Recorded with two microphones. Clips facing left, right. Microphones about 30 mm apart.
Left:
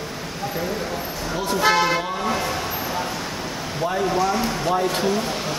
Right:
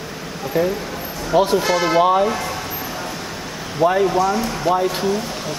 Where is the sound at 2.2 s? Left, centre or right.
Centre.